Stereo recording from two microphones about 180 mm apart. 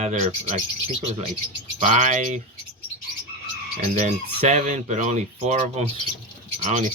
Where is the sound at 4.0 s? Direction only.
40° right (ahead or behind).